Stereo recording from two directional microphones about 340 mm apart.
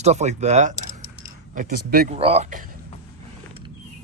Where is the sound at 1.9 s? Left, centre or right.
Right.